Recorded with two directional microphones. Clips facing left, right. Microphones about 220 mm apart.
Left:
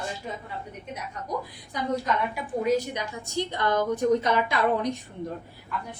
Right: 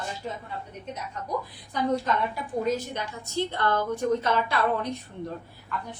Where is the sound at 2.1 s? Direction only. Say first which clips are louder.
Even; 10° left (ahead or behind).